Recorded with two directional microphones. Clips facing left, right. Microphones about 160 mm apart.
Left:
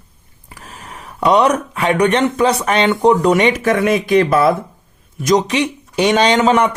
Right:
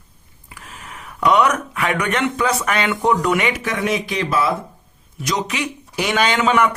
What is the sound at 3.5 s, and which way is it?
A man's voice, 50° left (ahead or behind).